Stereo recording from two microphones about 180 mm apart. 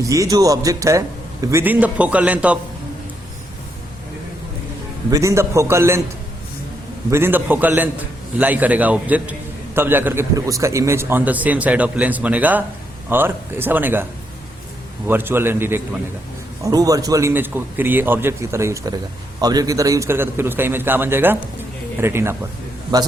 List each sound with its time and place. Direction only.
0.0 s a man's voice: 20° right (ahead or behind)
5.1 s a man's voice: 15° right (ahead or behind)
7.1 s a man's voice: 10° right (ahead or behind)